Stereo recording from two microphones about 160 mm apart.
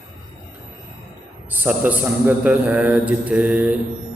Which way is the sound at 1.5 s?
10° right (ahead or behind).